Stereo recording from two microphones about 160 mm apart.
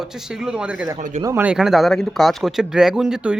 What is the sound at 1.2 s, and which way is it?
Speech, 15° right (ahead or behind).